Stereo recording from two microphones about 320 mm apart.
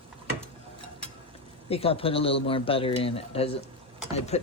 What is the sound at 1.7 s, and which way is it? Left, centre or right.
Speech, centre.